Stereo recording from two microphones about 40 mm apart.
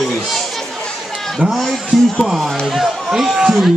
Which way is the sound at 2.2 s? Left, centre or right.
Centre.